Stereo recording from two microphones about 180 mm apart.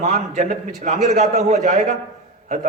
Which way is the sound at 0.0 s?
45° right (ahead or behind).